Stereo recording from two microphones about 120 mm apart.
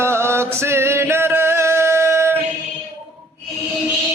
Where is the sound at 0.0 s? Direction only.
20° right (ahead or behind).